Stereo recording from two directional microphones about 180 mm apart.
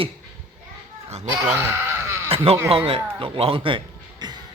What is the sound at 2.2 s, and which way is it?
Speech, 30° right (ahead or behind).